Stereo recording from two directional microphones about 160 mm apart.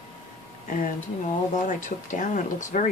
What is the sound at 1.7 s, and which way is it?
Speech, 55° left (ahead or behind).